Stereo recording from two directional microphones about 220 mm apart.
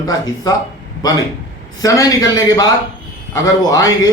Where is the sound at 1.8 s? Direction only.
15° left (ahead or behind).